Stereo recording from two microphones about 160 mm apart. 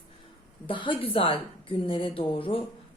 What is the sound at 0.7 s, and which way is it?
A woman's voice, 30° left (ahead or behind).